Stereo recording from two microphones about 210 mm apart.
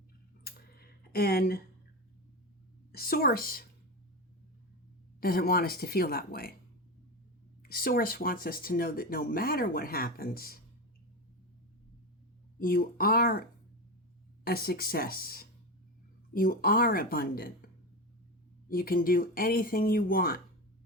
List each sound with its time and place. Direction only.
0.4 s typing: 45° left (ahead or behind)
2.9 s speech: 45° left (ahead or behind)
5.2 s speech: 45° left (ahead or behind)
7.6 s speech: 45° left (ahead or behind)
12.5 s speech: 45° left (ahead or behind)
14.4 s speech: 45° left (ahead or behind)
18.7 s speech: 45° left (ahead or behind)